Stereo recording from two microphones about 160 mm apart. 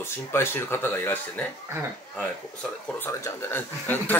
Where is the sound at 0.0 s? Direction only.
15° left (ahead or behind).